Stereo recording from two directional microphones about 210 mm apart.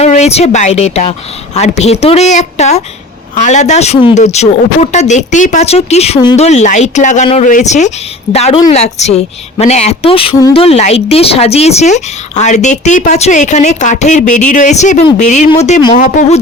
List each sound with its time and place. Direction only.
0.0 s speech: 30° left (ahead or behind)